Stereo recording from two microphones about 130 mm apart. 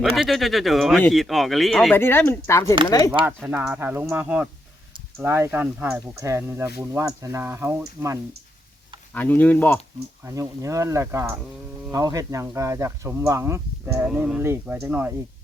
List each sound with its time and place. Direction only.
0.0 s speech: centre (ahead or behind)
1.9 s speech: 15° left (ahead or behind)
3.2 s speech: 15° right (ahead or behind)
9.1 s speech: 15° left (ahead or behind)
10.2 s speech: 25° right (ahead or behind)
14.1 s speech: 10° right (ahead or behind)